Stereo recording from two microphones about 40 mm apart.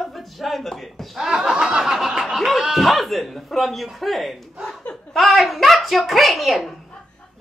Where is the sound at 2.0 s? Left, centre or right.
Centre.